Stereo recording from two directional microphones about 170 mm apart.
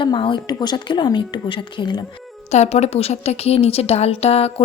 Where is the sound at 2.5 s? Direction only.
40° left (ahead or behind).